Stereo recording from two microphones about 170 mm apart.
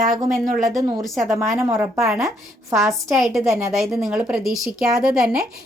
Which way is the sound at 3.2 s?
Centre (ahead or behind).